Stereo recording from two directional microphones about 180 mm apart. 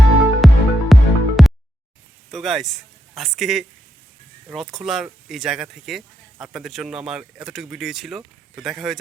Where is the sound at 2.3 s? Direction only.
Centre (ahead or behind).